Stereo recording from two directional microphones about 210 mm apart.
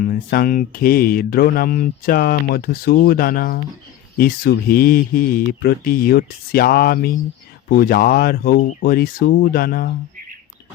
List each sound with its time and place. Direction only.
0.0 s mantra: 45° left (ahead or behind)